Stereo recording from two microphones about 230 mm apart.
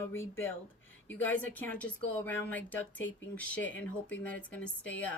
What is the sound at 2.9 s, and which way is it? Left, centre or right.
Speech, left.